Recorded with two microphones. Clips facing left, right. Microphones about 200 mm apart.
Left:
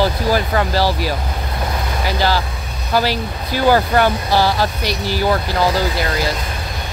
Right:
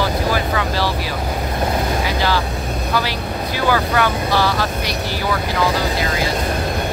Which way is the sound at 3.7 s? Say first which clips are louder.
Left 2 dB; 35° left (ahead or behind).